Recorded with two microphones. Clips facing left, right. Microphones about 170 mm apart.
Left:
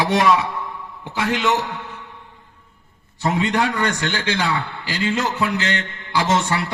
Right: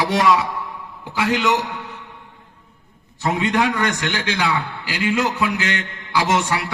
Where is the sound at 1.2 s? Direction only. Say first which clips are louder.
Right 1 dB; 10° right (ahead or behind).